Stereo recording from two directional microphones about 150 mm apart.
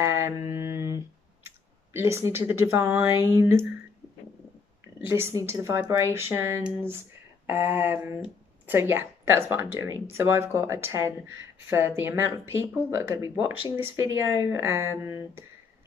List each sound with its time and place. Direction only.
0.0 s a sound: 15° right (ahead or behind)
2.0 s speech: 15° right (ahead or behind)
4.8 s a woman's voice: 15° right (ahead or behind)